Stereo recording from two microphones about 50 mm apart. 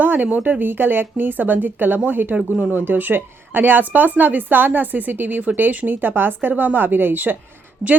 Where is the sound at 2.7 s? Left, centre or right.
Right.